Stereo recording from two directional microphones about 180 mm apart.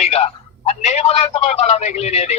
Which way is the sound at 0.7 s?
35° left (ahead or behind).